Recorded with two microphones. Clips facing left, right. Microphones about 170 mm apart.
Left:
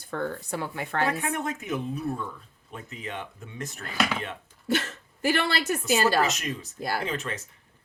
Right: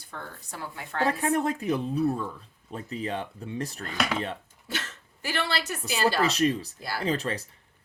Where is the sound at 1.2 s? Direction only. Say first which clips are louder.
Right 5 dB; 35° right (ahead or behind).